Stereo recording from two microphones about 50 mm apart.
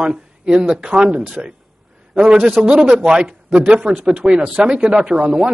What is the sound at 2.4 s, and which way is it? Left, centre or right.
Speech, centre.